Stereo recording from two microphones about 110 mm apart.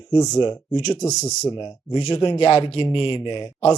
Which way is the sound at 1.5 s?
45° left (ahead or behind).